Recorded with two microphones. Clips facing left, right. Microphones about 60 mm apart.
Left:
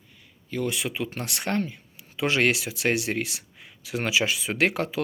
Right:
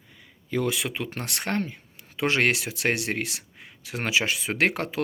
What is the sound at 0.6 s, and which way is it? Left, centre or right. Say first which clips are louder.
Speech: left 2 dB; right.